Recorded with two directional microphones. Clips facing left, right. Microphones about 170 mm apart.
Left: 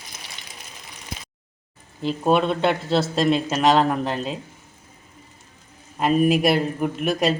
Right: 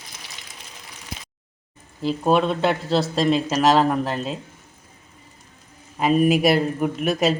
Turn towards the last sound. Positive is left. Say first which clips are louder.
# right 1 dB
turn(degrees=0)  # may be behind; listen again after turning